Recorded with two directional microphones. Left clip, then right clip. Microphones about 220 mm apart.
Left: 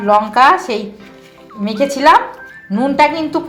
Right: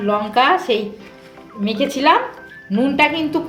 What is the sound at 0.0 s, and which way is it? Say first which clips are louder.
Speech: left 6 dB; 5° left (ahead or behind).